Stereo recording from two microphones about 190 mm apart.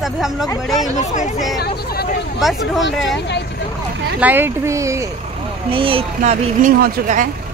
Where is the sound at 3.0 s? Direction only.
65° left (ahead or behind).